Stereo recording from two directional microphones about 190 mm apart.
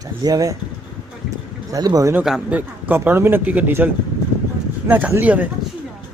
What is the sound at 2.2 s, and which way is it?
Speech, 5° right (ahead or behind).